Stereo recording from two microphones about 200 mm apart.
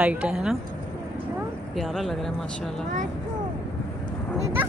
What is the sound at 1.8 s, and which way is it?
Speech, centre (ahead or behind).